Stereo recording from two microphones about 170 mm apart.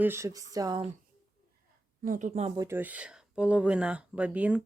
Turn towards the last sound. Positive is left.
turn(degrees=-10)  # may be behind; listen again after turning